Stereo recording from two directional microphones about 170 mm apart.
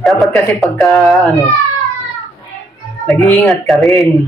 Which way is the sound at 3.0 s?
5° left (ahead or behind).